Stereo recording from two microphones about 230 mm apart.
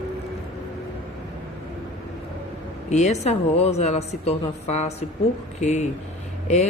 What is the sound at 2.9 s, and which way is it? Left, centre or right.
A woman's voice, left.